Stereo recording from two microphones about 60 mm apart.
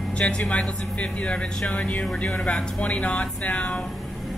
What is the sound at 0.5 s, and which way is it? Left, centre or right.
Speech, left.